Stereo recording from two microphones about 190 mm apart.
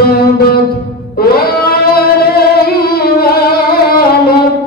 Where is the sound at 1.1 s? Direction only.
55° left (ahead or behind).